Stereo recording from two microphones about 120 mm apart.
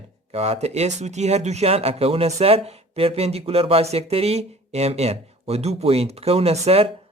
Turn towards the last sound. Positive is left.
turn(degrees=-60)  # may be behind; listen again after turning